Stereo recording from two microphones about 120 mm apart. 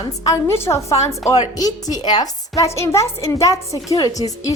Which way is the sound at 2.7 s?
25° left (ahead or behind).